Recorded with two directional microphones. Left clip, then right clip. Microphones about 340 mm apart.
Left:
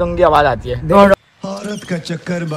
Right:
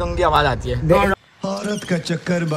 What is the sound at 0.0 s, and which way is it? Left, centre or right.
Speech, centre.